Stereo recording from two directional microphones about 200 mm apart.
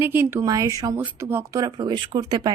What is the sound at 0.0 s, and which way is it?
A woman's voice, 10° right (ahead or behind).